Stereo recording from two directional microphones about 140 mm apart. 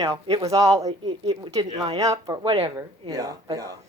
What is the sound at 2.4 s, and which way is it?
Speech, 40° right (ahead or behind).